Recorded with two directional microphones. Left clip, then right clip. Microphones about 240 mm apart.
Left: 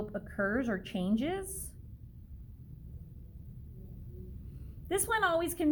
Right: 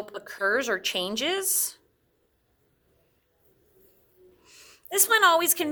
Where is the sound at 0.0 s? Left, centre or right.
Right.